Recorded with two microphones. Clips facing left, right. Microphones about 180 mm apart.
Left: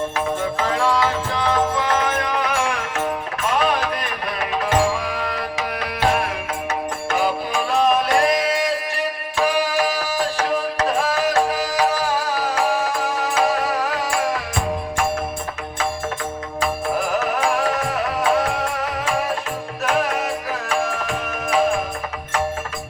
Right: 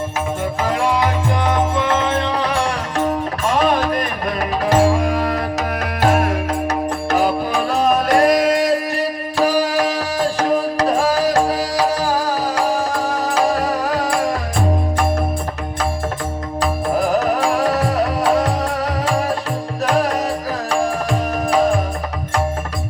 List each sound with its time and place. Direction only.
0.6 s music: 15° right (ahead or behind); by 14.2 s 35° right (ahead or behind)
17.1 s music: 35° right (ahead or behind)
19.8 s music: 40° right (ahead or behind)